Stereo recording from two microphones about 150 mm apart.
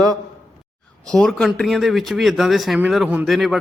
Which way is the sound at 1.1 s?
5° left (ahead or behind).